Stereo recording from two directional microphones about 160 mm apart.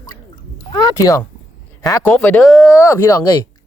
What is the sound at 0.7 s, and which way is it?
Speech, 20° left (ahead or behind).